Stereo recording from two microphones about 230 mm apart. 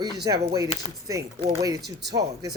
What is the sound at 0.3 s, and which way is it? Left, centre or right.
Speech, centre.